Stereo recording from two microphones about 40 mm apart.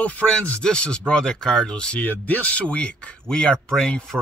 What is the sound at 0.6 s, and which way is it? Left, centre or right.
Speech, left.